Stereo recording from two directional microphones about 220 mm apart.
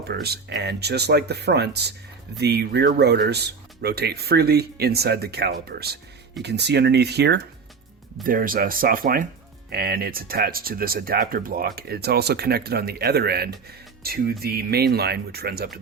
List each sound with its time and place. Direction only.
0.1 s speech: 45° right (ahead or behind)